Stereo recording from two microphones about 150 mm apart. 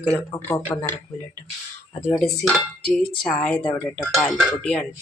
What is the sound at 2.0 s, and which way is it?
Dishes, 5° left (ahead or behind).